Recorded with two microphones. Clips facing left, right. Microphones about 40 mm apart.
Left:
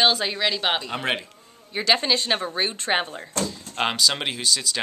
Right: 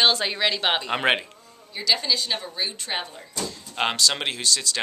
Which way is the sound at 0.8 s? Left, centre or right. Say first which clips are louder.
Right 4 dB; right.